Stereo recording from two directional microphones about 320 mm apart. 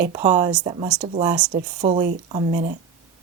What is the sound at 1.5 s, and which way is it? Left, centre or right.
Speech, right.